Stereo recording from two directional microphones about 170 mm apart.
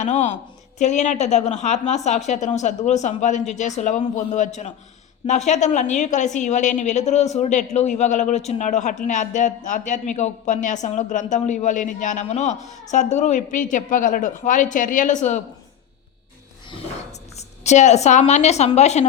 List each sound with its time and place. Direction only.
0.0 s a woman's voice: 45° left (ahead or behind)
17.3 s a woman's voice: 40° left (ahead or behind)